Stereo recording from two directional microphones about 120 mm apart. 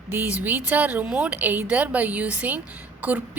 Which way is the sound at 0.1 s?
15° right (ahead or behind).